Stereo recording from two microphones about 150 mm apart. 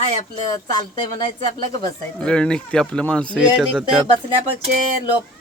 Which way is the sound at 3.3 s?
5° right (ahead or behind).